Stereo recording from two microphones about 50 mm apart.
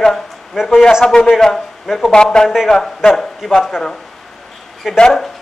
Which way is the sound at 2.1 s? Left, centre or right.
Centre.